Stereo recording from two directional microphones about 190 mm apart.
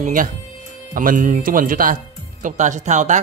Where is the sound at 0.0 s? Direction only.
45° right (ahead or behind).